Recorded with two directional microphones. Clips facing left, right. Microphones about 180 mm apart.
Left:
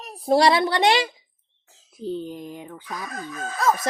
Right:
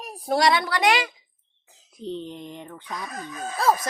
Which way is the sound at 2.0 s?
5° left (ahead or behind).